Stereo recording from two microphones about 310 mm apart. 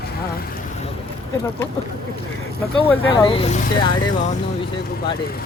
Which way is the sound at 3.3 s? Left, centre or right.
Centre.